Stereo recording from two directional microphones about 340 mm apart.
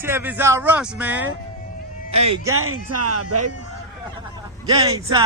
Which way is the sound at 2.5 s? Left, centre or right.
Right.